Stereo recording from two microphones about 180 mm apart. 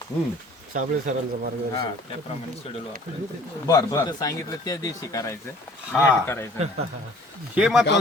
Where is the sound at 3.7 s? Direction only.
15° left (ahead or behind).